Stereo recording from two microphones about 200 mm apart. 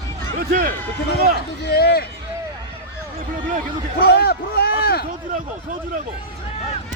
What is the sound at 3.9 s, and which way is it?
A man's voice, 50° left (ahead or behind).